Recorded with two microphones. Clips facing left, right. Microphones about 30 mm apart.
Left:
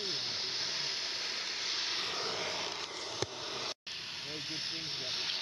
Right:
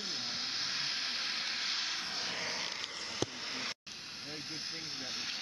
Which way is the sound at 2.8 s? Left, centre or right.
Centre.